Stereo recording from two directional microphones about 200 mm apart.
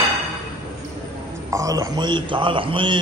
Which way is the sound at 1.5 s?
15° right (ahead or behind).